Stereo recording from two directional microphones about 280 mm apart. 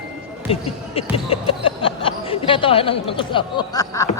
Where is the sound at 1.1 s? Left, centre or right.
Centre.